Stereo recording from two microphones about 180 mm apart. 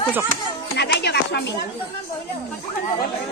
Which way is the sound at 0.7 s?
65° left (ahead or behind).